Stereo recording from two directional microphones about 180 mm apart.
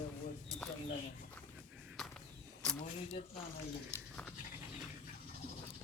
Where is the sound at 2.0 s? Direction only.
Centre (ahead or behind).